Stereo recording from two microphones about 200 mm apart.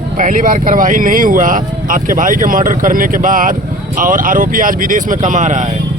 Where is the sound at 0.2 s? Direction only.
40° right (ahead or behind).